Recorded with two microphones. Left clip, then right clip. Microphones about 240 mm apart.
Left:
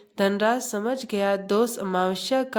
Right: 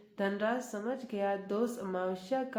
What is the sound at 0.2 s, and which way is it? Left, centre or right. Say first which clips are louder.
Speech: left 11 dB; left.